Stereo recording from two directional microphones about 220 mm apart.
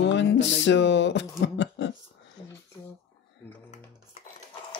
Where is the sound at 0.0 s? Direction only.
55° left (ahead or behind).